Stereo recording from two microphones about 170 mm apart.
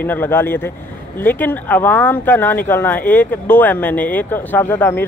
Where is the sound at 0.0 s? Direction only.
10° left (ahead or behind).